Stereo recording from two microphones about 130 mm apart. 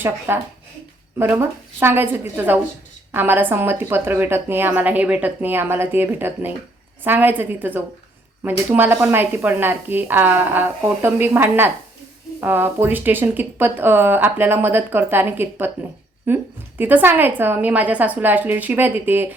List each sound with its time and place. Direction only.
0.3 s speech: 15° right (ahead or behind)